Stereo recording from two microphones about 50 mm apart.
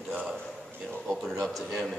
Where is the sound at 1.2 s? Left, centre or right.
Centre.